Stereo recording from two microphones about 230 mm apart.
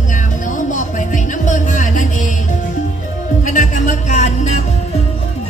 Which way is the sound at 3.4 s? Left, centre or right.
Left.